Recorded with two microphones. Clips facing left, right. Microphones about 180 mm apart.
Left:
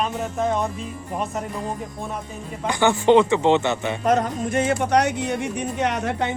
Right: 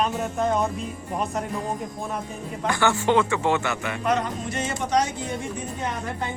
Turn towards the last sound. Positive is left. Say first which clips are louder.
# left 6 dB
turn(degrees=80)